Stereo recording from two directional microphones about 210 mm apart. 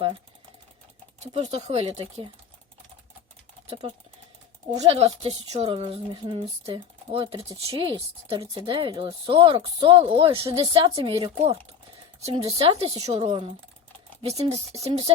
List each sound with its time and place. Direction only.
1.2 s a woman's voice: 30° right (ahead or behind)
3.7 s a woman's voice: 30° right (ahead or behind)